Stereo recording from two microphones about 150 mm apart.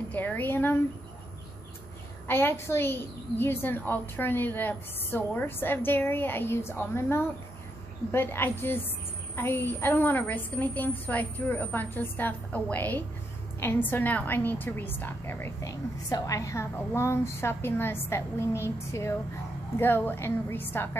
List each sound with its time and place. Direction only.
0.1 s speech: 10° left (ahead or behind)
2.2 s a woman's voice: 15° left (ahead or behind)